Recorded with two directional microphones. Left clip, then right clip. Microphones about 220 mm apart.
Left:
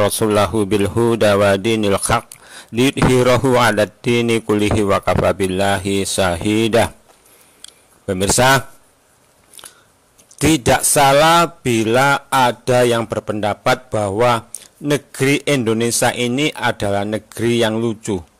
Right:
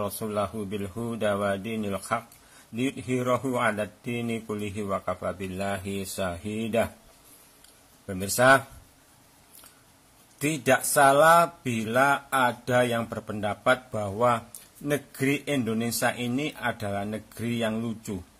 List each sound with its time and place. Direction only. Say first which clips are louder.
0.0 s speech: left 14 dB; 45° left (ahead or behind)
8.1 s speech: left 7 dB; 40° left (ahead or behind)
10.6 s a sound: left 5 dB; 40° left (ahead or behind)